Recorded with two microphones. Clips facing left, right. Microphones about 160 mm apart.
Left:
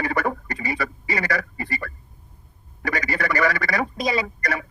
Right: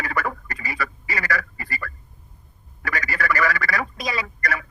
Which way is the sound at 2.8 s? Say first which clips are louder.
Left 2 dB; 25° left (ahead or behind).